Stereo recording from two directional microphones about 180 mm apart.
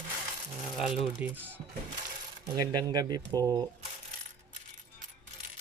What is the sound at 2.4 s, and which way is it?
Speech, 20° right (ahead or behind).